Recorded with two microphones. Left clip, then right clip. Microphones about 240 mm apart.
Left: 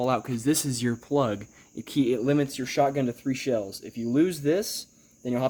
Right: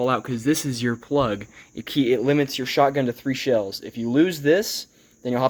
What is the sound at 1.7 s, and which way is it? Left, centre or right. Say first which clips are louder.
Speech: right 5 dB; centre.